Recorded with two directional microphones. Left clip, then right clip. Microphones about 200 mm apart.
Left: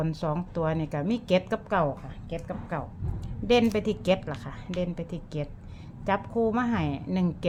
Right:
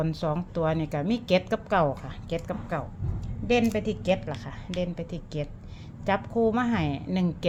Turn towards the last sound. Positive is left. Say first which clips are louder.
# right 1 dB
turn(degrees=0)  # may be behind; listen again after turning